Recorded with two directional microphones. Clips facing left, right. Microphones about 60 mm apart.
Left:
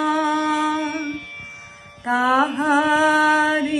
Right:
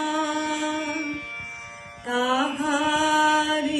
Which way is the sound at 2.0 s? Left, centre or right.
Left.